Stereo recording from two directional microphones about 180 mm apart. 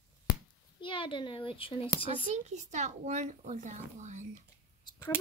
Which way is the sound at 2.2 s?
40° right (ahead or behind).